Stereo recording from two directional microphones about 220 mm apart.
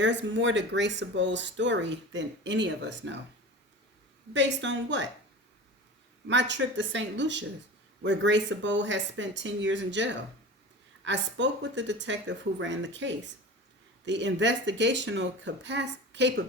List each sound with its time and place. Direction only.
0.0 s speech: 55° right (ahead or behind)
4.4 s speech: 55° right (ahead or behind)
6.2 s speech: 55° right (ahead or behind)